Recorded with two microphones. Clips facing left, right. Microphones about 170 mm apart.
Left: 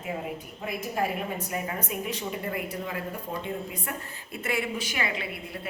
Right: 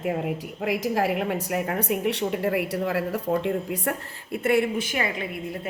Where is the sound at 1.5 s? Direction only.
65° right (ahead or behind).